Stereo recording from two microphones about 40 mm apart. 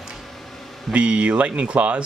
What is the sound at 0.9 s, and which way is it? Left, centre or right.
Speech, right.